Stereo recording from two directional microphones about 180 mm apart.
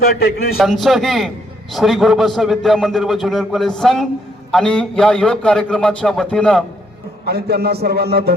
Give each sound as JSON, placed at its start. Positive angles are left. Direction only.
{"t": 0.0, "sound": "a man's voice", "side_deg": 55}
{"t": 0.6, "sound": "a man's voice", "side_deg": 0}
{"t": 7.3, "sound": "a man's voice", "side_deg": -60}